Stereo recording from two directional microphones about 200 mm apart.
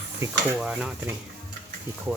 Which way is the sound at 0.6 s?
5° right (ahead or behind).